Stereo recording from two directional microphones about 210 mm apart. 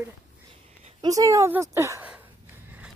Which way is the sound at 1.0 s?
15° right (ahead or behind).